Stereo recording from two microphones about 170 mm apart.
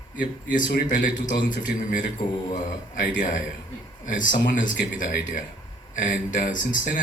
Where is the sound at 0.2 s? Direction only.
50° left (ahead or behind).